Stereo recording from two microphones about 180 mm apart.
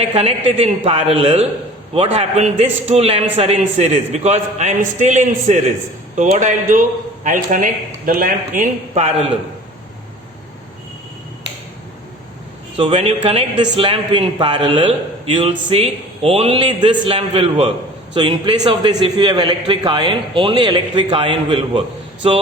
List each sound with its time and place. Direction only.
0.0 s a man's voice: 35° right (ahead or behind)
12.7 s a man's voice: 30° right (ahead or behind)